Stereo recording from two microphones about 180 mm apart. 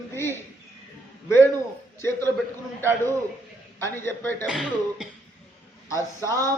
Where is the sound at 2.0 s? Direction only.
15° left (ahead or behind).